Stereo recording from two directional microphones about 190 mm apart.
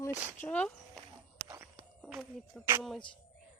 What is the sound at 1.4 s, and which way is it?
Walk, 15° right (ahead or behind).